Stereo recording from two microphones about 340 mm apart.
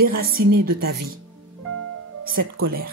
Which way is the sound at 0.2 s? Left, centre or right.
Right.